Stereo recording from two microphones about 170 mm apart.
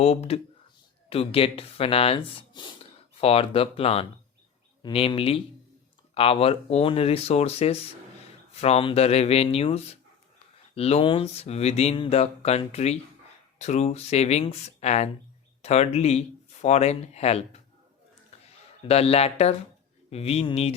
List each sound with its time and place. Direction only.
0.0 s speech: 40° left (ahead or behind)
18.9 s speech: 35° left (ahead or behind)